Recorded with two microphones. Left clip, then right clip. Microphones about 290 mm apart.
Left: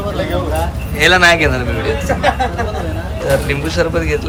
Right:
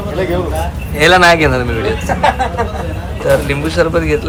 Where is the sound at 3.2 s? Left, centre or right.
Centre.